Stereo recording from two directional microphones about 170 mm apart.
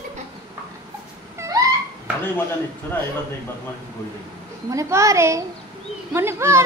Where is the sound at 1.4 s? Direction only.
20° right (ahead or behind).